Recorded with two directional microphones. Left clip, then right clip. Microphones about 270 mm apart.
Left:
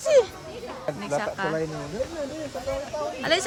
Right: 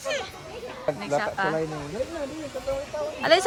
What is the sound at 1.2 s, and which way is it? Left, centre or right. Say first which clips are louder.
Speech: right 2 dB; centre.